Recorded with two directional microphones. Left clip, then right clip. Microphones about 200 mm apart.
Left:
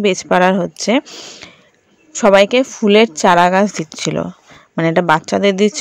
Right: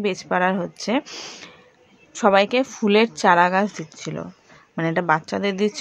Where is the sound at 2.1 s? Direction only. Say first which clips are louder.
Left 7 dB; 25° left (ahead or behind).